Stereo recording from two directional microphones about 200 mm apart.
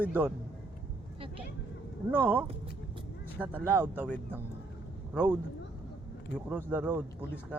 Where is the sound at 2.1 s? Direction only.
10° right (ahead or behind).